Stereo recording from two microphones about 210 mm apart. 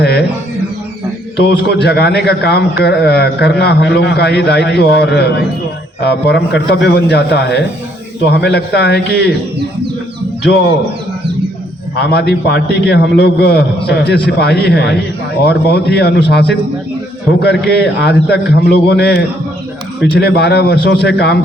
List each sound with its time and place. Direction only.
0.0 s a sound: 50° left (ahead or behind)
1.4 s a man's voice: 50° left (ahead or behind)
11.9 s a man's voice: 50° left (ahead or behind)